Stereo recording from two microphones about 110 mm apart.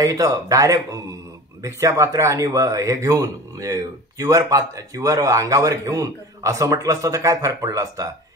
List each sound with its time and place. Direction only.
0.0 s speech: 30° right (ahead or behind)